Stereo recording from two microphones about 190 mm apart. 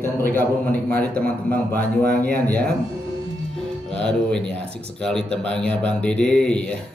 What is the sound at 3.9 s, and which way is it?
A man's voice, 5° left (ahead or behind).